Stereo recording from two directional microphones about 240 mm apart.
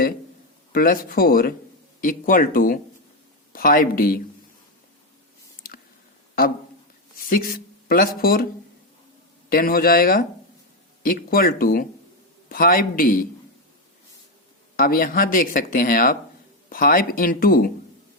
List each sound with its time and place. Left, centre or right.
0.7 s speech: left
7.2 s speech: left
9.5 s speech: left
14.8 s speech: left